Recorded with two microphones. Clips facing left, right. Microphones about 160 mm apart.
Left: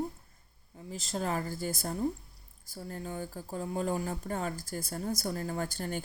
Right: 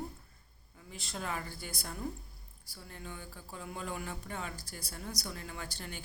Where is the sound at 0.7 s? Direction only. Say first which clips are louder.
Left 8 dB; 35° left (ahead or behind).